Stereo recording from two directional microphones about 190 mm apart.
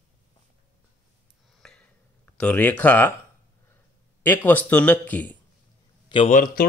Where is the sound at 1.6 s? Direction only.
5° left (ahead or behind).